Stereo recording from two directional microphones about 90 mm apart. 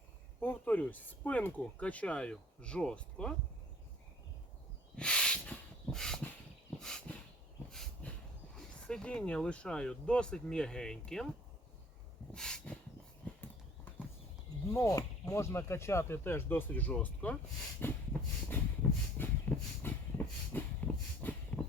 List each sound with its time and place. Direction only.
0.3 s speech: 25° left (ahead or behind)
4.9 s snort: 10° left (ahead or behind)
6.7 s dog: 5° left (ahead or behind)
7.7 s a sound: 5° left (ahead or behind)
8.5 s speech: 10° left (ahead or behind)
12.3 s snort: 5° left (ahead or behind)
14.7 s speech: 35° left (ahead or behind)
18.4 s train: 20° left (ahead or behind)